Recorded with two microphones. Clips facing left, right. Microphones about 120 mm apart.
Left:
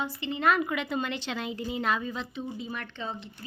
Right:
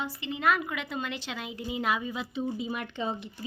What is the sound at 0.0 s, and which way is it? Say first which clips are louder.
A woman's voice: left 1 dB; centre (ahead or behind).